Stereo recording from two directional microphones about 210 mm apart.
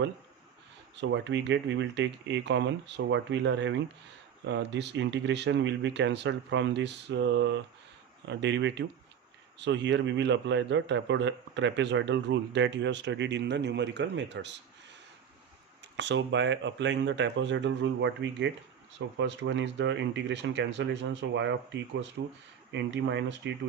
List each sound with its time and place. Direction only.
0.9 s a man's voice: 60° right (ahead or behind)
15.8 s a man's voice: 55° right (ahead or behind)